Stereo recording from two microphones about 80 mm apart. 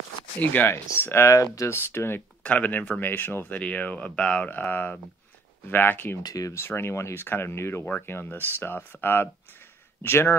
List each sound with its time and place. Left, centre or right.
0.4 s speech: left
1.7 s speech: left
2.4 s speech: centre
4.6 s speech: left
6.2 s speech: left
6.5 s speech: left